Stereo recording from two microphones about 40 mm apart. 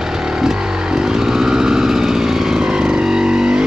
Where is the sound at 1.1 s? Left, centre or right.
Centre.